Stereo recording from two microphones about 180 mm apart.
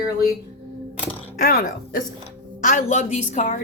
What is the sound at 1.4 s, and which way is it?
Speech, 50° left (ahead or behind).